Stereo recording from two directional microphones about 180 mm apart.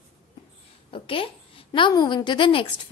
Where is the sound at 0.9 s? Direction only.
30° left (ahead or behind).